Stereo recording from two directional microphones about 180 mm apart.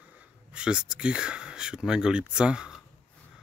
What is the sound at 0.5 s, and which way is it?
Speech, 5° right (ahead or behind).